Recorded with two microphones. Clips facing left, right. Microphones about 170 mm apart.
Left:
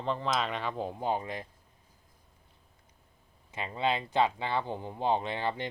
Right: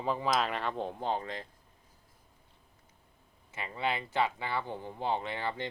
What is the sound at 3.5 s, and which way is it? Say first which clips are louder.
Speech: left 3 dB; 20° left (ahead or behind).